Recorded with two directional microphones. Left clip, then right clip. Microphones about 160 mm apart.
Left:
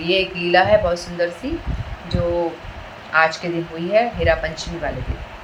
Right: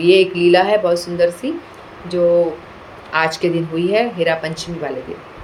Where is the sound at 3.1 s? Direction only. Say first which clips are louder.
Even; 50° right (ahead or behind).